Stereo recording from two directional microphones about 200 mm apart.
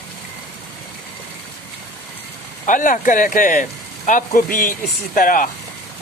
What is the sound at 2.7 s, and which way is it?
Speech, 40° left (ahead or behind).